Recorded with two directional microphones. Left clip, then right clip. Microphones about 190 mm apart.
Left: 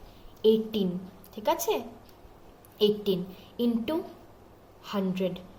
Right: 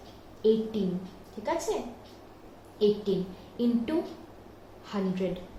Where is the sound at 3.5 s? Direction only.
25° left (ahead or behind).